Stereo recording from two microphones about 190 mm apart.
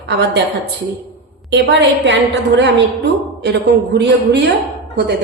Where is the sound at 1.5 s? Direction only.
65° right (ahead or behind).